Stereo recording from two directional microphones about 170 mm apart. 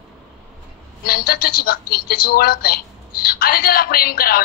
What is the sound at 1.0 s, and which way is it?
A woman's voice, 60° left (ahead or behind).